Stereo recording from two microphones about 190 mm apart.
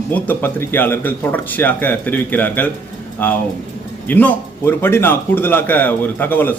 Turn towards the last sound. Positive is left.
turn(degrees=10)  # may be behind; listen again after turning